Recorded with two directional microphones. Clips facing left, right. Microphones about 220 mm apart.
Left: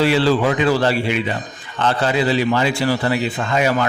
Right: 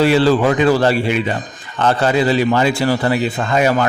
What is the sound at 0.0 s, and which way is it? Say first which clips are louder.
A man's voice: right 3 dB; 45° right (ahead or behind).